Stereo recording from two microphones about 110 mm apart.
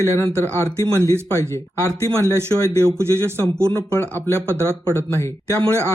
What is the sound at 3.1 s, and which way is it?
Speech, 20° left (ahead or behind).